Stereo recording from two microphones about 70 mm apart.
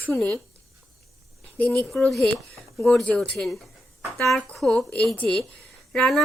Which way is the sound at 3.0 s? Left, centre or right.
Centre.